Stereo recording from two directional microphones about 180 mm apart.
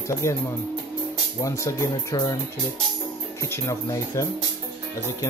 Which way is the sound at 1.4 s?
15° left (ahead or behind).